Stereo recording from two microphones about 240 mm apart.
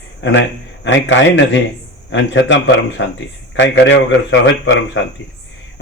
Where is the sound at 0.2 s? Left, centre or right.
Left.